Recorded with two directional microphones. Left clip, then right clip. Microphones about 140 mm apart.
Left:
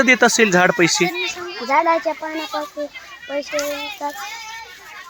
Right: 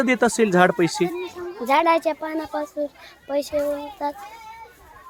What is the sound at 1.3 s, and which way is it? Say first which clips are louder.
Children playing: left 3 dB; 30° right (ahead or behind).